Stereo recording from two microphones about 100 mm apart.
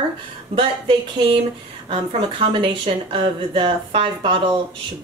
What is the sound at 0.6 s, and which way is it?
A woman's voice, 55° right (ahead or behind).